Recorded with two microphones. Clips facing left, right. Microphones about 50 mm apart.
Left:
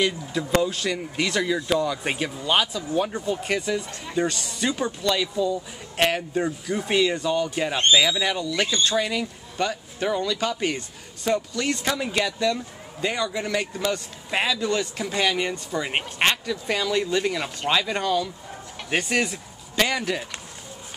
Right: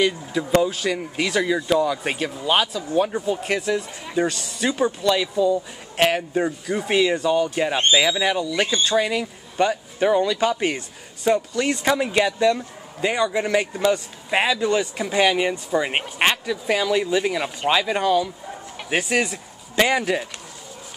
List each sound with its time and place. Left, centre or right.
0.0 s speech: centre
19.7 s speech: centre